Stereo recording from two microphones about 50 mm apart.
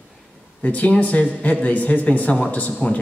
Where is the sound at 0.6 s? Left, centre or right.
Left.